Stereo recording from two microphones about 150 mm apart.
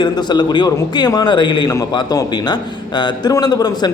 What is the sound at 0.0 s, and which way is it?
A man's voice, 30° left (ahead or behind).